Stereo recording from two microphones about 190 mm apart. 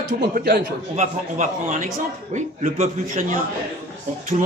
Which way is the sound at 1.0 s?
40° right (ahead or behind).